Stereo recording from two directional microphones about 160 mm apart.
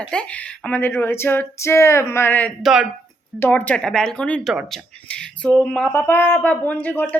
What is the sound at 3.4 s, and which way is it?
Speech, 10° left (ahead or behind).